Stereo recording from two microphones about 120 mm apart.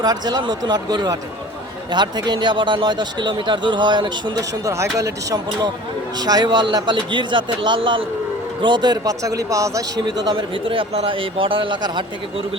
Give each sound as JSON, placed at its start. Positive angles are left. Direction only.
{"t": 0.0, "sound": "a man's voice", "side_deg": -35}
{"t": 10.1, "sound": "a man's voice", "side_deg": -45}